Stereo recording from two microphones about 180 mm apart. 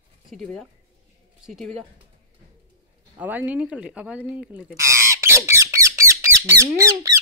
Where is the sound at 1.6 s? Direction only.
40° right (ahead or behind).